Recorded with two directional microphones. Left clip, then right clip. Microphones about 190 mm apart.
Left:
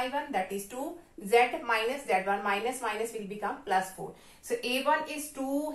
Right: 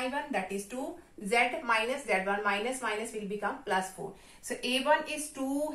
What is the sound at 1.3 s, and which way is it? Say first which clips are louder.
A woman's voice: left 2 dB; 15° right (ahead or behind).